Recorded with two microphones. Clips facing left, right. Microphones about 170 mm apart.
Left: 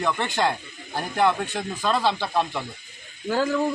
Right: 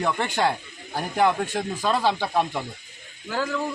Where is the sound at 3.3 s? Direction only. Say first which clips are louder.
Left 4 dB; 25° left (ahead or behind).